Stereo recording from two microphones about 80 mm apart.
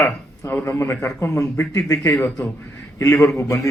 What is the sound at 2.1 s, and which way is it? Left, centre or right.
Speech, centre.